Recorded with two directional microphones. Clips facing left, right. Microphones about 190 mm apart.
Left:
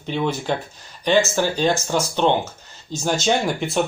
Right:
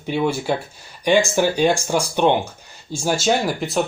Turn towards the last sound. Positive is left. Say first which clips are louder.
# right 1 dB
turn(degrees=0)  # may be behind; listen again after turning